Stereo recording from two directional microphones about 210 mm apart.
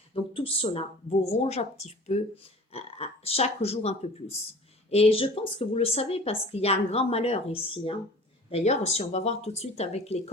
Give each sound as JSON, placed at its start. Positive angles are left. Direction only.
{"t": 0.1, "sound": "speech", "side_deg": 25}